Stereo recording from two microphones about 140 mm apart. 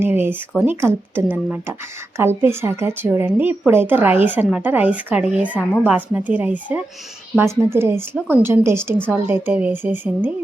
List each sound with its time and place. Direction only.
0.0 s a woman's voice: 15° right (ahead or behind)